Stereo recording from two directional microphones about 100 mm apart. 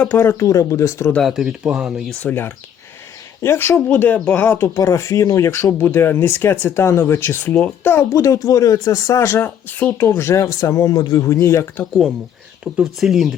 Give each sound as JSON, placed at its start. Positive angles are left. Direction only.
{"t": 0.1, "sound": "speech", "side_deg": 25}
{"t": 1.3, "sound": "speech", "side_deg": 0}
{"t": 2.2, "sound": "speech", "side_deg": 20}
{"t": 8.1, "sound": "speech", "side_deg": 35}
{"t": 12.8, "sound": "speech", "side_deg": 0}